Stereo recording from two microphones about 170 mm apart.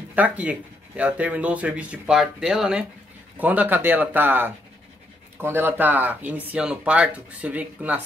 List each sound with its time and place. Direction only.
0.1 s speech: 10° right (ahead or behind)